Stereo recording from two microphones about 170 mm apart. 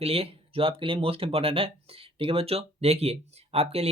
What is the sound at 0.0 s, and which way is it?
Speech, 35° right (ahead or behind).